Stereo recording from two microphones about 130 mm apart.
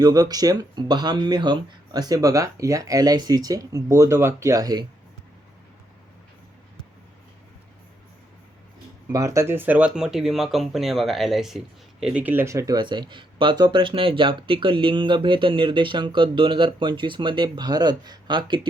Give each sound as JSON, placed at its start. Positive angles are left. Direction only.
{"t": 0.0, "sound": "speech", "side_deg": -30}
{"t": 9.1, "sound": "speech", "side_deg": -25}